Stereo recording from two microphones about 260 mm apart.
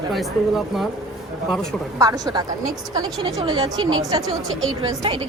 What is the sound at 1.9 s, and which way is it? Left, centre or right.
A woman's voice, centre.